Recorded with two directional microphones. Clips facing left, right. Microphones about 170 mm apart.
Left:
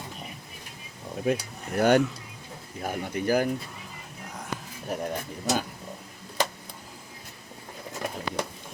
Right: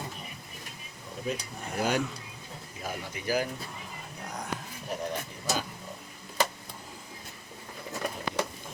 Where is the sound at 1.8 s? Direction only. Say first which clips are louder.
Left 8 dB; 60° left (ahead or behind).